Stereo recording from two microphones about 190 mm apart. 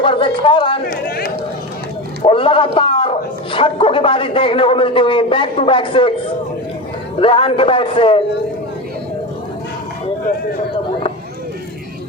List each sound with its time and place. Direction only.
0.0 s a man's voice: 25° left (ahead or behind)
0.9 s a sound: 50° left (ahead or behind)
2.2 s a man's voice: 25° left (ahead or behind)
7.2 s a man's voice: 25° left (ahead or behind)